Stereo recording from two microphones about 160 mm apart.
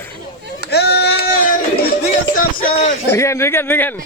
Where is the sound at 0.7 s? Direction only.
90° left; by 1.6 s 70° left (ahead or behind).